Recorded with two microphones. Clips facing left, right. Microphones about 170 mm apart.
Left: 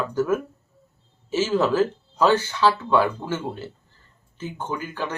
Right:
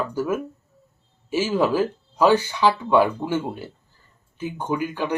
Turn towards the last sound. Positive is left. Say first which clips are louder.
# right 4 dB
turn(degrees=-15)  # may be behind; listen again after turning